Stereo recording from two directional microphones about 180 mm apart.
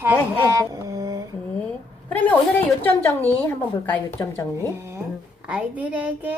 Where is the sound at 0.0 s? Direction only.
15° right (ahead or behind).